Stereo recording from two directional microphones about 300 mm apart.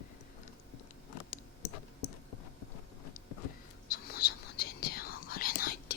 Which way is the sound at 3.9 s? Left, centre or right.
Left.